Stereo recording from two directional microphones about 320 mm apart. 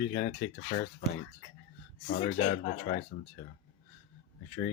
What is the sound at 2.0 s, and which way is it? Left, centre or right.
Speech, left.